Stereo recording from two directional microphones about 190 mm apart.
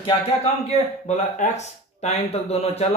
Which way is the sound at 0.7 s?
35° left (ahead or behind).